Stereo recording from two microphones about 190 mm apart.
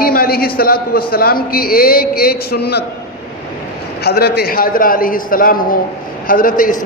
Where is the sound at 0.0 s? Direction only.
50° left (ahead or behind).